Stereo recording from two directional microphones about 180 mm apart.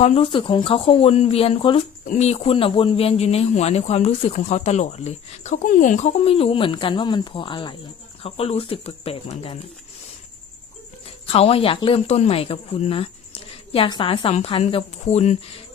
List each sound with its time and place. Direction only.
0.0 s a man's voice: 35° left (ahead or behind)
11.0 s a man's voice: 35° left (ahead or behind)